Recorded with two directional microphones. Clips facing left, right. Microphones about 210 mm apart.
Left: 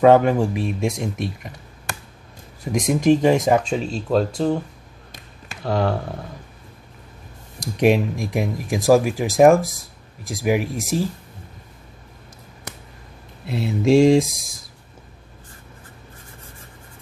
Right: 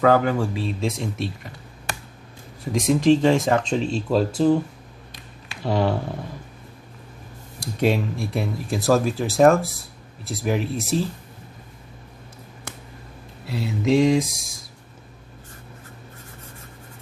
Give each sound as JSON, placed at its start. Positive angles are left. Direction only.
{"t": 0.0, "sound": "speech", "side_deg": 25}
{"t": 2.7, "sound": "speech", "side_deg": 15}
{"t": 5.6, "sound": "speech", "side_deg": 0}
{"t": 7.6, "sound": "speech", "side_deg": 20}
{"t": 13.5, "sound": "a sound", "side_deg": 25}